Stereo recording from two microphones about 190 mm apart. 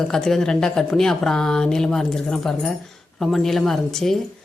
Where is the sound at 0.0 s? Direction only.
5° left (ahead or behind).